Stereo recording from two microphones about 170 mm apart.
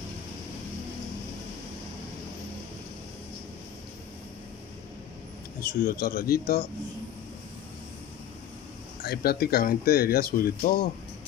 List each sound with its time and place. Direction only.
5.6 s speech: 60° left (ahead or behind)
9.0 s speech: 65° left (ahead or behind)